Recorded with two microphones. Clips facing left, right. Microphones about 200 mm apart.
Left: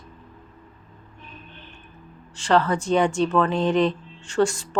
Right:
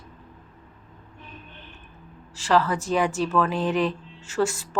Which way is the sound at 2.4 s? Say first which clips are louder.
Left 2 dB; centre (ahead or behind).